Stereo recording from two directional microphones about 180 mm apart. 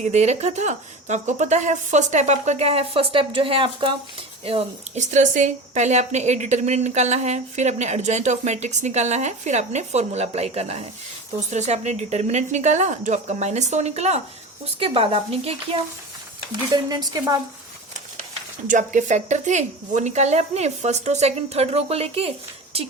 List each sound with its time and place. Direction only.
0.0 s speech: 40° right (ahead or behind)
16.9 s a woman's voice: 20° right (ahead or behind)
18.7 s speech: 45° right (ahead or behind)